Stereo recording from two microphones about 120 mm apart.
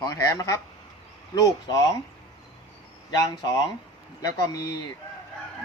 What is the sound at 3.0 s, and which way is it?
A man's voice, 35° left (ahead or behind).